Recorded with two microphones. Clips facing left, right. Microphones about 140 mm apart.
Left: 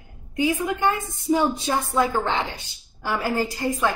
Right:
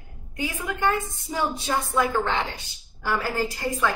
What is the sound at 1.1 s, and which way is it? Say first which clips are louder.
A woman's voice: left 7 dB; 15° left (ahead or behind).